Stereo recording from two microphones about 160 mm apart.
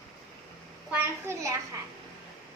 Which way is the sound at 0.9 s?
15° right (ahead or behind).